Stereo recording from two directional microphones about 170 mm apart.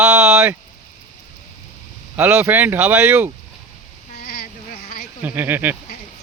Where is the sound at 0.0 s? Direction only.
5° right (ahead or behind).